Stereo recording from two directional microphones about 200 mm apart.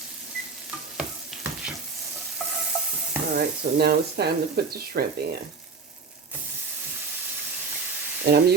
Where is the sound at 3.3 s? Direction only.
50° right (ahead or behind).